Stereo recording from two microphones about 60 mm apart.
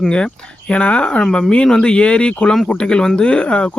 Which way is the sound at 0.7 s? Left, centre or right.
Centre.